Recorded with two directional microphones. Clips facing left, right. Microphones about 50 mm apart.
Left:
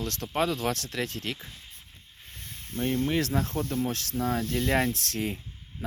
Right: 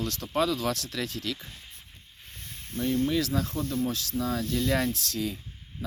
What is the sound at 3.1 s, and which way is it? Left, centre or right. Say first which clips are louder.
Speech: even; left.